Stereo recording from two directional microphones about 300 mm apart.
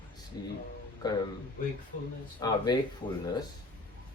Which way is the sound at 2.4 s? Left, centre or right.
Centre.